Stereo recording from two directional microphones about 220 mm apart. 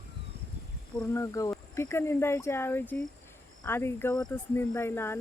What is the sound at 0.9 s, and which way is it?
Speech, 15° left (ahead or behind).